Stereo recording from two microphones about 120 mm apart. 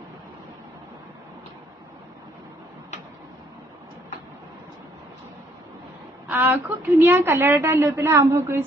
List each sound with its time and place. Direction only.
6.3 s a woman's voice: 15° right (ahead or behind)